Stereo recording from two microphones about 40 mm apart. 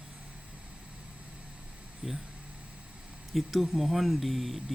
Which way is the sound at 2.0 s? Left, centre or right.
Centre.